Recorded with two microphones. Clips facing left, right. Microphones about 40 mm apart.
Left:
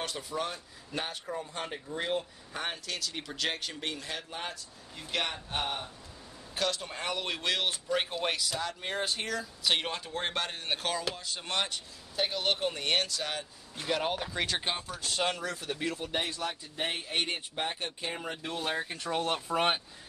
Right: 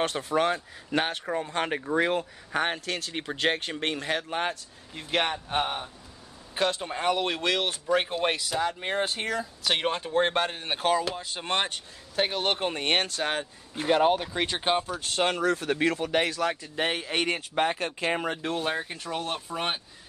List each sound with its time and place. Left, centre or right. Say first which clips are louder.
0.0 s speech: right 9 dB; right
2.6 s speech: right 5 dB; right
5.6 s speech: right 4 dB; centre
7.4 s speech: even; centre
7.9 s speech: right 8 dB; right
11.1 s speech: right 5 dB; right
14.6 s speech: right 8 dB; right
18.2 s speech: right 7 dB; right
18.8 s speech: even; centre